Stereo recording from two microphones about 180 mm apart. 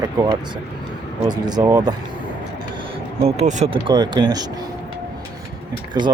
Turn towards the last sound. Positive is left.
turn(degrees=-20)  # may be behind; listen again after turning